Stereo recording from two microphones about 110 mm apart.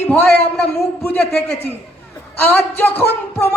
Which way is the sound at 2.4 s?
15° left (ahead or behind).